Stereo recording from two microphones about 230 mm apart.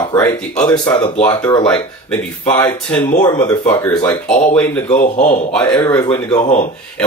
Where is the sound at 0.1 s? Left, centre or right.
Centre.